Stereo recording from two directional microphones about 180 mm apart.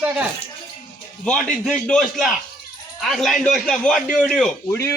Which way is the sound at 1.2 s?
5° left (ahead or behind).